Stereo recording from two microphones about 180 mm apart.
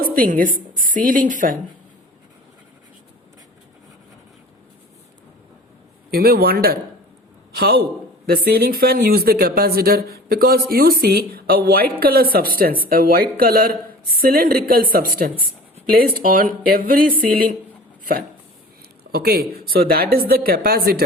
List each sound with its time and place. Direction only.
0.0 s a woman's voice: 50° right (ahead or behind)
6.1 s speech: 60° right (ahead or behind)